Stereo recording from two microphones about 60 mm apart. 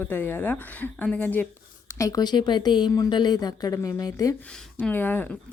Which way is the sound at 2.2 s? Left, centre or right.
Left.